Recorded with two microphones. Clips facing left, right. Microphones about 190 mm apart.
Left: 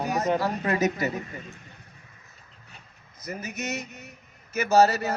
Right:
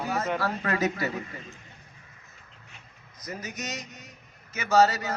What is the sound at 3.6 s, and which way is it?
A man's voice, 60° left (ahead or behind).